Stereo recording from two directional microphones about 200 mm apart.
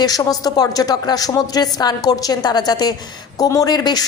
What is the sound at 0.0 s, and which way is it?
A woman's voice, 20° left (ahead or behind).